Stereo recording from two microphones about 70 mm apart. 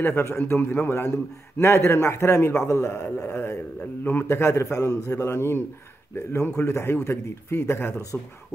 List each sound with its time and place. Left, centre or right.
0.0 s a man's voice: left
5.2 s a man's voice: left
8.1 s speech: left